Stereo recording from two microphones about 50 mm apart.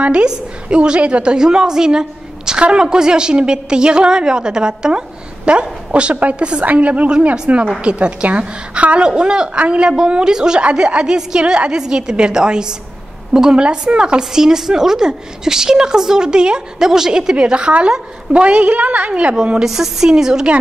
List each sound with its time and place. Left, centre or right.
0.0 s a woman's voice: centre
19.3 s a woman's voice: centre